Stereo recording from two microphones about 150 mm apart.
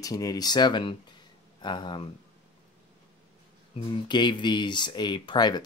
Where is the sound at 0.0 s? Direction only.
25° left (ahead or behind).